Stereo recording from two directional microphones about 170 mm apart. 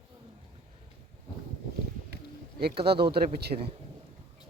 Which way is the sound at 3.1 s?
70° right (ahead or behind).